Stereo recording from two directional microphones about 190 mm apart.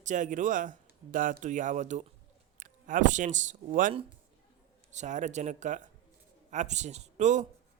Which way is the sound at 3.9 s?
30° right (ahead or behind).